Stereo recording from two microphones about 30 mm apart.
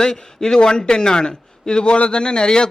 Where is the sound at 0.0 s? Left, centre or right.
Left.